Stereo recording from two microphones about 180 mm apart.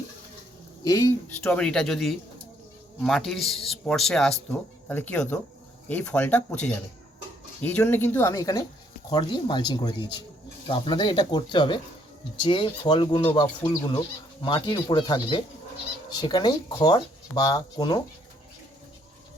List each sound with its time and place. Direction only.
0.9 s speech: 20° left (ahead or behind)
1.5 s speech: 5° left (ahead or behind)
7.6 s speech: 10° left (ahead or behind)